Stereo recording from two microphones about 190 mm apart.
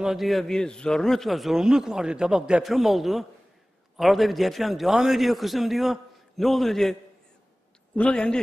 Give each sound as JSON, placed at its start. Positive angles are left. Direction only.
{"t": 0.0, "sound": "a man's voice", "side_deg": 0}